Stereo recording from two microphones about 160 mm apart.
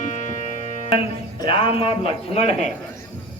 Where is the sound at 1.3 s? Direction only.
35° left (ahead or behind).